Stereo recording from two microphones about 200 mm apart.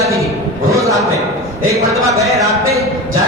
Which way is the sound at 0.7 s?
15° right (ahead or behind).